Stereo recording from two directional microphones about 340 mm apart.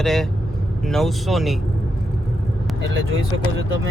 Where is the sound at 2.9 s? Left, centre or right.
Right.